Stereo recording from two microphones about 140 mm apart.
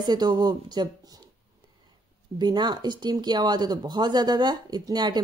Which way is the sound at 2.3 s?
30° right (ahead or behind).